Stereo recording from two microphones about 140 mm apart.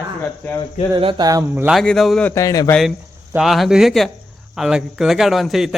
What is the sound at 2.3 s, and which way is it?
Speech, 25° left (ahead or behind).